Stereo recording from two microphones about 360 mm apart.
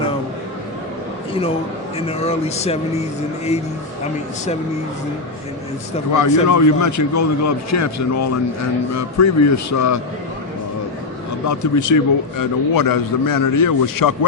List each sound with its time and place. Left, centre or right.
1.3 s a man's voice: centre
6.1 s a man's voice: left
11.4 s a man's voice: left